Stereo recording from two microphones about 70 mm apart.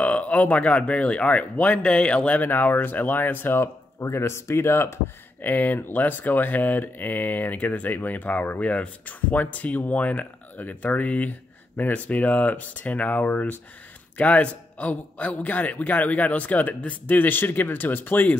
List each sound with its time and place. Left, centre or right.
0.0 s speech: left
5.4 s speech: left